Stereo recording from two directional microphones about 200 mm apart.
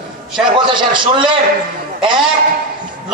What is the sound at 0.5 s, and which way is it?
Speech, 25° right (ahead or behind).